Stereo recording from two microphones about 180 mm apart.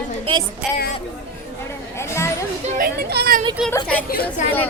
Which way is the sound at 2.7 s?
60° right (ahead or behind).